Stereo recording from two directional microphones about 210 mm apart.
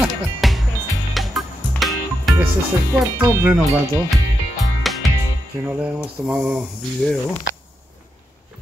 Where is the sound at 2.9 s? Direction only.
10° right (ahead or behind).